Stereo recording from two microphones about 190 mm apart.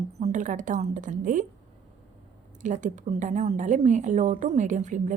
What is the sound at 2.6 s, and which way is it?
A woman's voice, 40° right (ahead or behind).